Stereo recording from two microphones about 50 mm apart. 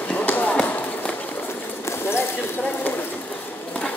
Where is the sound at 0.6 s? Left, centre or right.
Left.